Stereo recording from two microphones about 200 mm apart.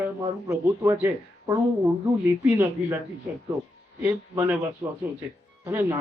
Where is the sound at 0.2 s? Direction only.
15° right (ahead or behind).